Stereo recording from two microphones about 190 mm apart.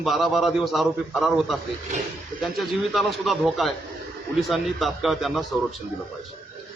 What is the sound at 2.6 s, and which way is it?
A man's voice, centre (ahead or behind).